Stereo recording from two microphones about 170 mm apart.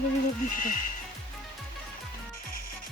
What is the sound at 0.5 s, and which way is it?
Speech, 50° left (ahead or behind).